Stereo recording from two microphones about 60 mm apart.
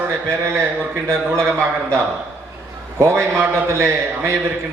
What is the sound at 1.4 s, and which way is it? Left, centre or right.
Speech, right.